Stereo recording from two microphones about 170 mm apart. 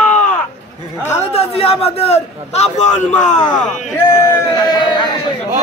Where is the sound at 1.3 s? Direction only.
35° left (ahead or behind).